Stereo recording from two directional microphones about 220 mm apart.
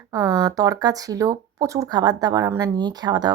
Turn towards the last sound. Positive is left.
turn(degrees=-20)  # may be behind; listen again after turning